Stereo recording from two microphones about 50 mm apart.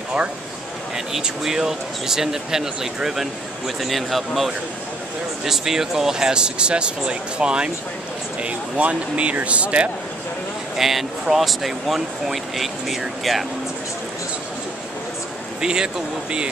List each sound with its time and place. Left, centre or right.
0.9 s speech: centre
10.8 s speech: centre
15.6 s speech: centre